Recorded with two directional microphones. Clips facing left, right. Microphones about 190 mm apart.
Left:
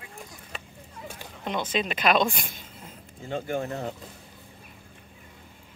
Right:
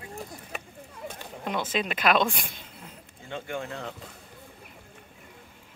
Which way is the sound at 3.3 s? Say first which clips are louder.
Left 5 dB; 45° left (ahead or behind).